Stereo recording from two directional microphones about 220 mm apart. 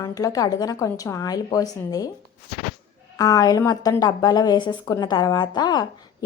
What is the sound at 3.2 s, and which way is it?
A woman's voice, 15° left (ahead or behind).